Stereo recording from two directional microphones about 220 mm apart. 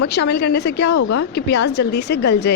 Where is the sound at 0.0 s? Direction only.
50° left (ahead or behind).